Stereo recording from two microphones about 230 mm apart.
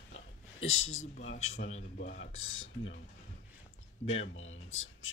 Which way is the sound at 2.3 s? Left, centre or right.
Left.